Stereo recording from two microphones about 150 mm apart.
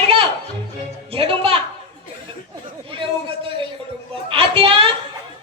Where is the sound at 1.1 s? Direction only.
35° right (ahead or behind).